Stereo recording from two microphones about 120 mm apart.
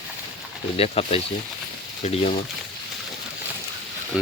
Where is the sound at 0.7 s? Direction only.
55° left (ahead or behind).